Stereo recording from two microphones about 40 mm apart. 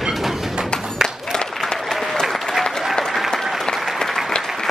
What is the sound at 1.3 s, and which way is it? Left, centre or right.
Applause, centre.